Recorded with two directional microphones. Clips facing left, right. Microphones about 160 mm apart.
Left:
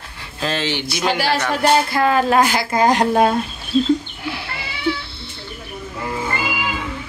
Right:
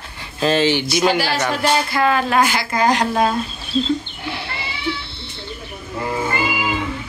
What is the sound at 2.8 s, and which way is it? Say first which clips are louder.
Speech: left 2 dB; 50° left (ahead or behind).